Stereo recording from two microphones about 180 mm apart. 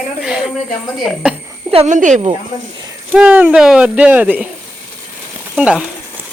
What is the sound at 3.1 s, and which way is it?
Speech, 10° right (ahead or behind).